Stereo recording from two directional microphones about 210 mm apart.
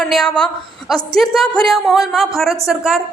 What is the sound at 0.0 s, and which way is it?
A woman's voice, centre (ahead or behind).